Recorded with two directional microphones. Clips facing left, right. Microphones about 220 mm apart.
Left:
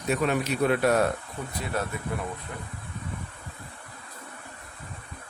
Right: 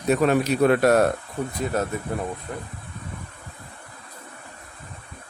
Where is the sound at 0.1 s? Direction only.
40° right (ahead or behind).